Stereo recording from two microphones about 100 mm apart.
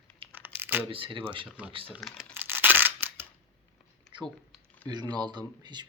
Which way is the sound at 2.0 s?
Centre (ahead or behind).